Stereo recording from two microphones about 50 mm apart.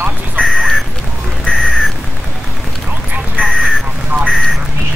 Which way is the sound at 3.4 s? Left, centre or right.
Centre.